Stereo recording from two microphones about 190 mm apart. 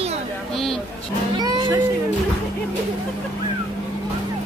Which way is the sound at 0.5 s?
Centre (ahead or behind).